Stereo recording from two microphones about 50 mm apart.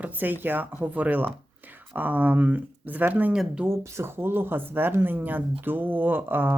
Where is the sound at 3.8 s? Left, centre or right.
Right.